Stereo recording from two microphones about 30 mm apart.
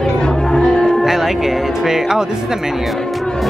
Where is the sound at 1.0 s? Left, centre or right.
Centre.